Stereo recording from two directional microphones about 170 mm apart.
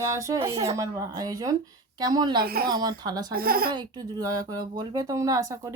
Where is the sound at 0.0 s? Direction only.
20° right (ahead or behind).